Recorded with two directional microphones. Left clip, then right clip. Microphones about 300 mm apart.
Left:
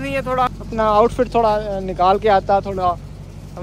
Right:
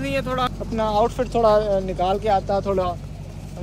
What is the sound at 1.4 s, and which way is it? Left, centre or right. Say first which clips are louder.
Speech: right 4 dB; centre.